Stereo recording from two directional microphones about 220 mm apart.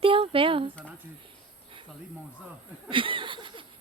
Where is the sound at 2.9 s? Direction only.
25° right (ahead or behind).